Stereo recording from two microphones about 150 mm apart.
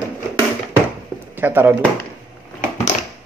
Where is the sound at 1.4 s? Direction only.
15° right (ahead or behind).